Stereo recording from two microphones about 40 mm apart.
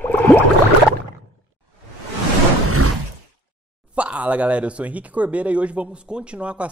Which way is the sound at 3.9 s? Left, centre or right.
Right.